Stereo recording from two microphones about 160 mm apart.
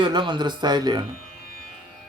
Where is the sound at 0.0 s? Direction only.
30° right (ahead or behind).